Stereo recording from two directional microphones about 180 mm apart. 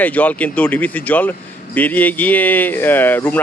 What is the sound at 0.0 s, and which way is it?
Speech, 10° left (ahead or behind).